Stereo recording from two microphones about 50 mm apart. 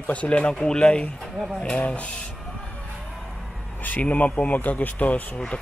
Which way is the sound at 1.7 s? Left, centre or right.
Left.